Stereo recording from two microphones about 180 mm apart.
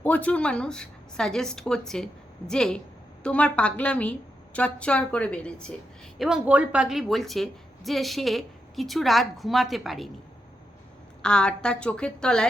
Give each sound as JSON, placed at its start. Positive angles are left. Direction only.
{"t": 0.0, "sound": "a woman's voice", "side_deg": 10}
{"t": 11.2, "sound": "a woman's voice", "side_deg": 5}